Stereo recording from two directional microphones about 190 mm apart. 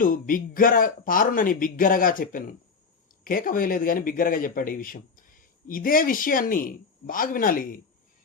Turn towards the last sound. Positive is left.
turn(degrees=45)  # may be behind; listen again after turning